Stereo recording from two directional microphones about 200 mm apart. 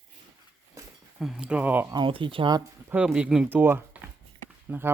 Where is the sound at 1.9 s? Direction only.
25° right (ahead or behind).